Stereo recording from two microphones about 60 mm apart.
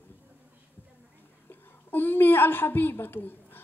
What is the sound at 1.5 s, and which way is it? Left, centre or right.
A woman's voice, left.